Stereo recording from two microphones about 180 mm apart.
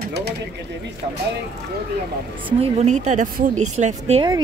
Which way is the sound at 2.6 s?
40° right (ahead or behind).